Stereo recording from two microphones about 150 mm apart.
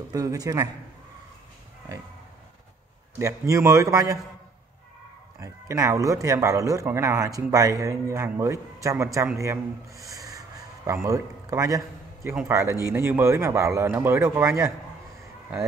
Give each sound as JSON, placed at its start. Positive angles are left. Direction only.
{"t": 0.1, "sound": "speech", "side_deg": -25}
{"t": 3.2, "sound": "speech", "side_deg": -20}
{"t": 5.4, "sound": "a man's voice", "side_deg": -20}